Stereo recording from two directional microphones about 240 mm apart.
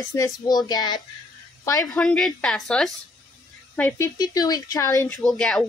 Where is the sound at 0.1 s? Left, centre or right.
Centre.